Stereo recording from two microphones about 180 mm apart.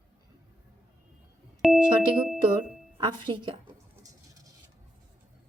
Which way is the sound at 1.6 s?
Centre (ahead or behind).